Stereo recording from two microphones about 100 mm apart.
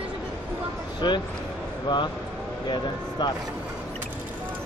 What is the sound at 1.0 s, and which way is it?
Speech, 45° left (ahead or behind).